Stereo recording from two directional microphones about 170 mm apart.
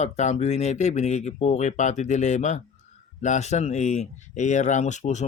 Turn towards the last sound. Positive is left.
turn(degrees=45)  # may be behind; listen again after turning